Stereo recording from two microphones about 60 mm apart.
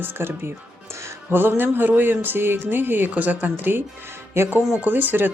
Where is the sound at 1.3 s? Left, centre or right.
Right.